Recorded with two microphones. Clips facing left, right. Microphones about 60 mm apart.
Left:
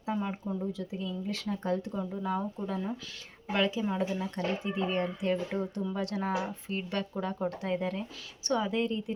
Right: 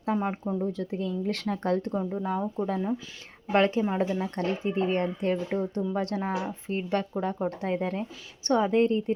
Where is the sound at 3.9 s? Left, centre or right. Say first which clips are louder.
Right 4 dB; right.